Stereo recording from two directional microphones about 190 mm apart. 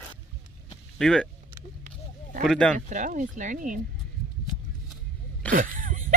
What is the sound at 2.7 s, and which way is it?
Speech, 40° right (ahead or behind).